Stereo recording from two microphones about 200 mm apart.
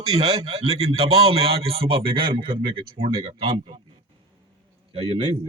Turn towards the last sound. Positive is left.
turn(degrees=-25)  # may be behind; listen again after turning